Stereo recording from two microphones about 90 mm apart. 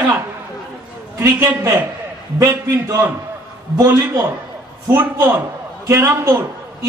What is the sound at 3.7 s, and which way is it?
A man's voice, 30° right (ahead or behind).